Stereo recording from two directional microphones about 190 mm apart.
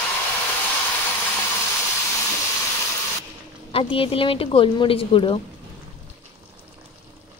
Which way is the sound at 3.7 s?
30° left (ahead or behind).